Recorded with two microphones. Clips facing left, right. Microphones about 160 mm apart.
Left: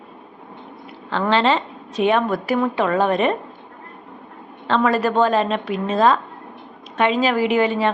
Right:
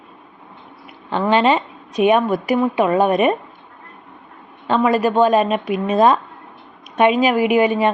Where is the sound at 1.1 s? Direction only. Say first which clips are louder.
Right 2 dB; 15° right (ahead or behind).